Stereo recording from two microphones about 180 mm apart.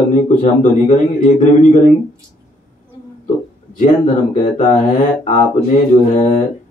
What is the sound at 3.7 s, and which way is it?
Speech, 45° left (ahead or behind).